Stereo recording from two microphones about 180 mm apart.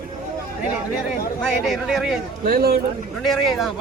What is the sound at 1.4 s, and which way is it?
Speech, centre (ahead or behind).